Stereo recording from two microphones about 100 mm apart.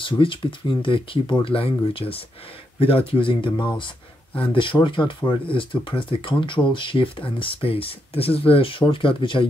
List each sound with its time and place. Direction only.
0.0 s speech: 60° left (ahead or behind)